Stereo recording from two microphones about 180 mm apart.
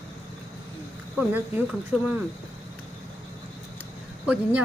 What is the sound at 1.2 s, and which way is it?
Speech, 10° right (ahead or behind).